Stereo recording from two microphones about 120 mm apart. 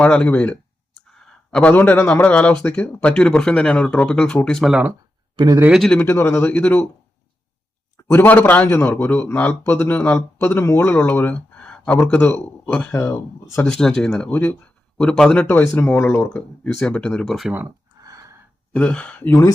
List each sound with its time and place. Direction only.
0.0 s a man's voice: 10° left (ahead or behind)
6.0 s a man's voice: 20° left (ahead or behind)
8.0 s a man's voice: 20° left (ahead or behind)
13.7 s a man's voice: 5° left (ahead or behind)
18.0 s gasp: 30° right (ahead or behind)
18.7 s a man's voice: 10° left (ahead or behind)